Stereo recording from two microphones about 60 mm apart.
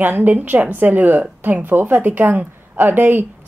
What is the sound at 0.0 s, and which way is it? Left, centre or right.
A woman's voice, right.